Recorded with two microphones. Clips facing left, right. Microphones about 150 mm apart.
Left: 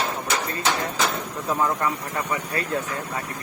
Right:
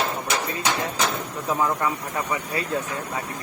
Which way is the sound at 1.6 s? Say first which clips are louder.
Even; 5° right (ahead or behind).